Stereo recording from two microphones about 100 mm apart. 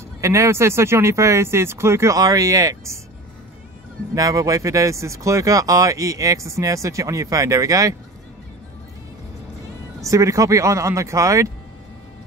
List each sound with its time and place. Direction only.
0.2 s speech: 30° right (ahead or behind)
4.1 s speech: 35° right (ahead or behind)
10.0 s speech: 30° right (ahead or behind)